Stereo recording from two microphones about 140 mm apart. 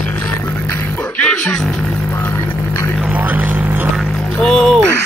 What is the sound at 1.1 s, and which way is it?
Music, 5° left (ahead or behind).